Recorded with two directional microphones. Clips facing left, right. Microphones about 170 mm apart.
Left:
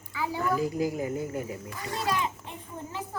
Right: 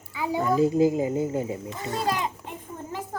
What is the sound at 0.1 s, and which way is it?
A child's voice, 20° right (ahead or behind).